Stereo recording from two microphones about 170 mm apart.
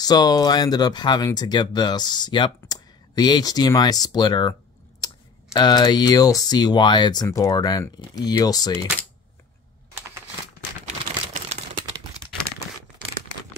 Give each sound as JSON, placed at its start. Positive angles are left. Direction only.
{"t": 0.0, "sound": "speech", "side_deg": 25}